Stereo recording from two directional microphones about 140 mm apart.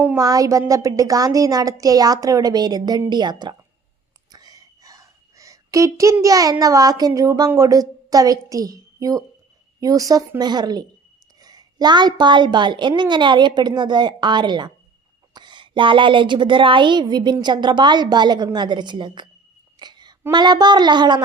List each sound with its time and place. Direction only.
0.2 s a woman's voice: 25° right (ahead or behind)
4.3 s whispering: 30° right (ahead or behind)
6.2 s a woman's voice: 25° right (ahead or behind)
19.8 s a sound: 30° right (ahead or behind)
20.3 s a woman's voice: 30° right (ahead or behind)